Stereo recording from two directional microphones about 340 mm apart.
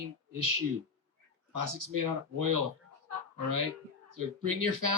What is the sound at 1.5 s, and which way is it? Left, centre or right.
Speech, right.